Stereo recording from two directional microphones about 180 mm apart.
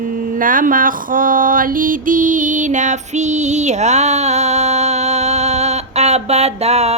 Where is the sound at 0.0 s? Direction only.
50° right (ahead or behind).